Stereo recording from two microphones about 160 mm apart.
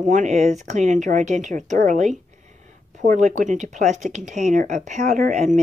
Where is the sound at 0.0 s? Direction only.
50° right (ahead or behind).